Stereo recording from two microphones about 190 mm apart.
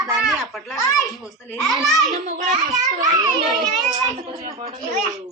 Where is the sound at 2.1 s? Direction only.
40° right (ahead or behind).